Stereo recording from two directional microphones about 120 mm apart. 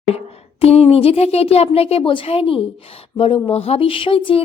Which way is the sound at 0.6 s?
55° left (ahead or behind).